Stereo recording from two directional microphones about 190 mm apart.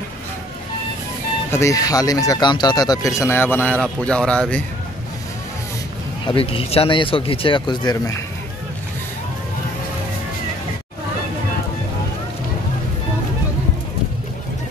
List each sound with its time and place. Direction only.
1.5 s speech: 15° left (ahead or behind)
6.2 s speech: 30° left (ahead or behind)